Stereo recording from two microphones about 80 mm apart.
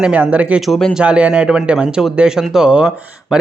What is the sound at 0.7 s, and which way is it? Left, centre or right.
Speech, centre.